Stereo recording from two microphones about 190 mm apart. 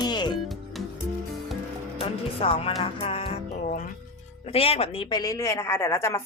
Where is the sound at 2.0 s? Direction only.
30° left (ahead or behind).